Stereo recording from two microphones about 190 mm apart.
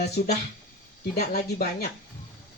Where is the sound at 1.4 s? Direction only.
55° left (ahead or behind).